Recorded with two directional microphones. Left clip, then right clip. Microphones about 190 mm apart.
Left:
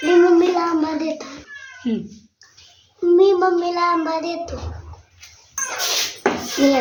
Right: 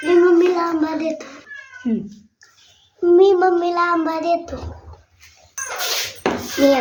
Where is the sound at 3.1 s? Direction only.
5° left (ahead or behind).